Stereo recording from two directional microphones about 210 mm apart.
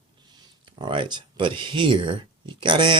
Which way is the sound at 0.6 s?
25° right (ahead or behind).